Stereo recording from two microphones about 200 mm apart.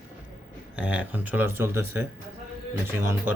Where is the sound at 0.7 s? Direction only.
5° right (ahead or behind).